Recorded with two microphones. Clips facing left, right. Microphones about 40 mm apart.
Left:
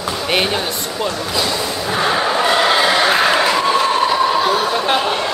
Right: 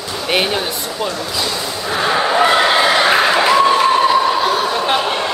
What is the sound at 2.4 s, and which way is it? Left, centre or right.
Neigh, centre.